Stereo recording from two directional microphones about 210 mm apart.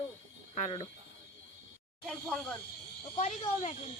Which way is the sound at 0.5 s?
25° left (ahead or behind).